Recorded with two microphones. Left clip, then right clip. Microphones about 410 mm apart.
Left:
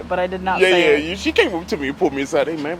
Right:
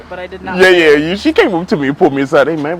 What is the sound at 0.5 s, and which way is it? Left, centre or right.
Speech, right.